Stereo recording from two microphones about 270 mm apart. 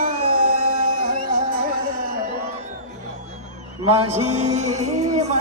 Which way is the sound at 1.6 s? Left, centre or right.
Right.